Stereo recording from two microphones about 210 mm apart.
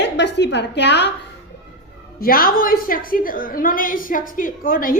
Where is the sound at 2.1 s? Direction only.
45° left (ahead or behind).